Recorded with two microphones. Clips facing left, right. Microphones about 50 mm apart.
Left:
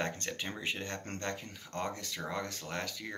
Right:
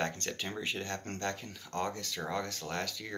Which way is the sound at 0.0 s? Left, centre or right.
Centre.